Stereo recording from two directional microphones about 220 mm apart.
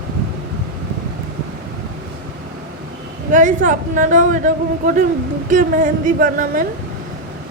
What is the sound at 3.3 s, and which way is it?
Speech, 35° right (ahead or behind).